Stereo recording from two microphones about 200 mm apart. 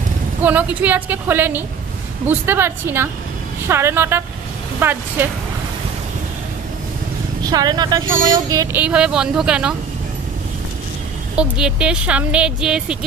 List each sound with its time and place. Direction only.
0.4 s a woman's voice: 10° right (ahead or behind)
7.4 s speech: 20° right (ahead or behind)
8.8 s speech: 5° right (ahead or behind)
11.3 s speech: 5° right (ahead or behind)